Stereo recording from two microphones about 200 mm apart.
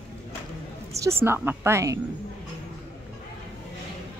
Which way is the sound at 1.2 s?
10° right (ahead or behind).